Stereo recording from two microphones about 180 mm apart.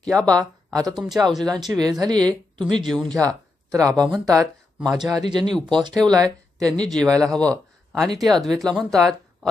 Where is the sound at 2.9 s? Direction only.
5° left (ahead or behind).